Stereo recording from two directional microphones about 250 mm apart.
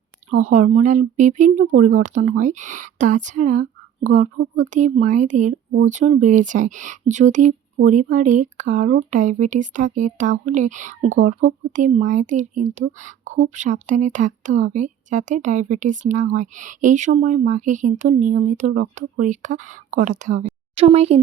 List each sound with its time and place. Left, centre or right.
0.3 s speech: right